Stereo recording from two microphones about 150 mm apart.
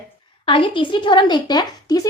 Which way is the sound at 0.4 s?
35° left (ahead or behind).